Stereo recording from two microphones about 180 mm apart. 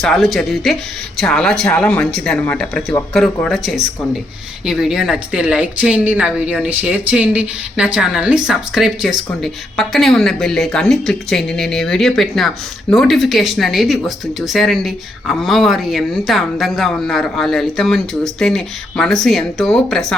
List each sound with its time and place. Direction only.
0.0 s a woman's voice: centre (ahead or behind)